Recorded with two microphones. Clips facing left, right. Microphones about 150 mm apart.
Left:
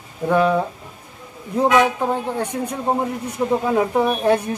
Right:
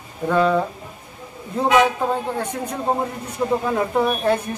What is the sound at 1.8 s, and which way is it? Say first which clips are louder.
A woman's voice: even; 15° left (ahead or behind).